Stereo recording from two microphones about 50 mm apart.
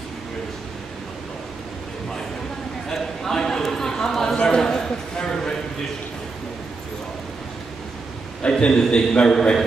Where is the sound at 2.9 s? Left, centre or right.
Centre.